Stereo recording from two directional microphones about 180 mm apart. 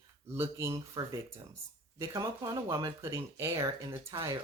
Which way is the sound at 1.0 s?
20° right (ahead or behind).